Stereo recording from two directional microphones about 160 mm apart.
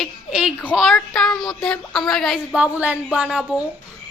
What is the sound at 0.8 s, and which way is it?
A woman's voice, centre (ahead or behind).